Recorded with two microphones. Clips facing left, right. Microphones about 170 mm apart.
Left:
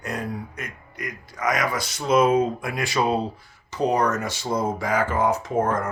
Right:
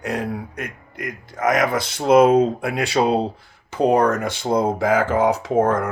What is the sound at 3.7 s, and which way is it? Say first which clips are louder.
Speech: right 5 dB; 55° right (ahead or behind).